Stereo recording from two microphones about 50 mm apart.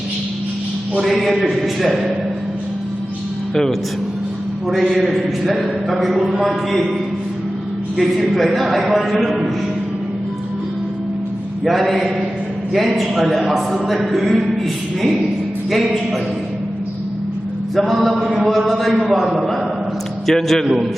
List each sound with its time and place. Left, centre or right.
0.9 s a man's voice: centre
3.5 s a man's voice: centre
4.7 s a man's voice: centre
8.3 s a man's voice: centre
11.6 s a man's voice: centre
15.7 s a man's voice: centre
17.7 s a man's voice: centre